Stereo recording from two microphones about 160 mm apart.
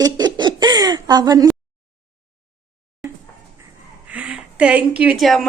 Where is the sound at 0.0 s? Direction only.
25° right (ahead or behind).